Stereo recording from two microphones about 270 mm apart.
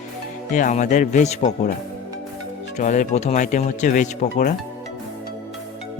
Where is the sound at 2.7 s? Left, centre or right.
Left.